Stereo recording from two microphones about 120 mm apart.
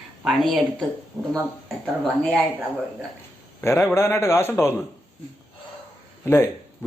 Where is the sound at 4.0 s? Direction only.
20° left (ahead or behind).